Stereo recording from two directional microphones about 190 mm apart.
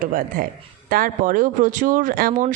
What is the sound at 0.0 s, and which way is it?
Speech, 45° right (ahead or behind).